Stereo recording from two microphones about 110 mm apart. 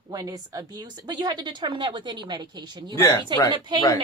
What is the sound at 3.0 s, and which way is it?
Speech, 35° left (ahead or behind).